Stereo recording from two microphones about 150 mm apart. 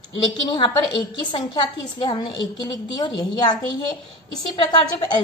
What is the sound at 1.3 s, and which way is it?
A woman's voice, 30° left (ahead or behind).